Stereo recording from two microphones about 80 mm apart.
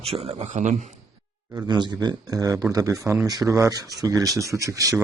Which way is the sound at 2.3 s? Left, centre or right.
Right.